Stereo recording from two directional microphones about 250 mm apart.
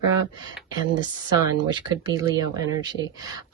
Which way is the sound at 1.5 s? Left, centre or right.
Centre.